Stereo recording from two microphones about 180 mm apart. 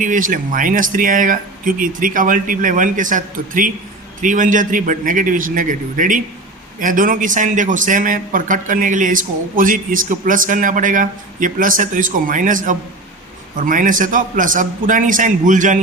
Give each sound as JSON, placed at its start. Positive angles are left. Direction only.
{"t": 0.0, "sound": "a man's voice", "side_deg": -45}